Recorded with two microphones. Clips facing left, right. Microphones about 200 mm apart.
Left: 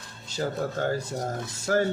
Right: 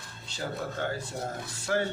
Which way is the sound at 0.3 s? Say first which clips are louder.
Left 6 dB; 45° left (ahead or behind).